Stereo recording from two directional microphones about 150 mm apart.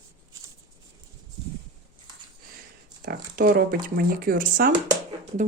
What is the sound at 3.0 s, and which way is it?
Speech, 70° right (ahead or behind).